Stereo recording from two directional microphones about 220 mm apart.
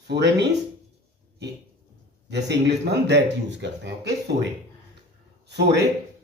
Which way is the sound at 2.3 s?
50° right (ahead or behind).